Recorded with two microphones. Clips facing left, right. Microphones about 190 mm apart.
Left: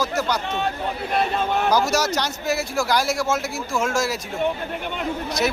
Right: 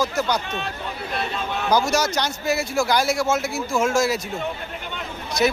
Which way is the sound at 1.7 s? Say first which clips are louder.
Right 3 dB; 5° left (ahead or behind).